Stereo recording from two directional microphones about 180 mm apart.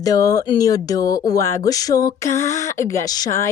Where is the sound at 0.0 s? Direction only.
20° left (ahead or behind).